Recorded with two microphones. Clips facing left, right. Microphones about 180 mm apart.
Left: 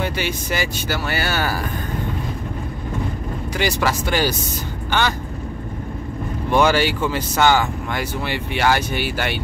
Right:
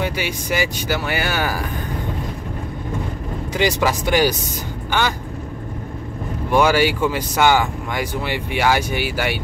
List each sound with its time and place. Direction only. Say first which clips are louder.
0.0 s speech: even; 10° right (ahead or behind)
3.5 s speech: right 2 dB; 20° right (ahead or behind)
6.5 s speech: right 1 dB; 10° right (ahead or behind)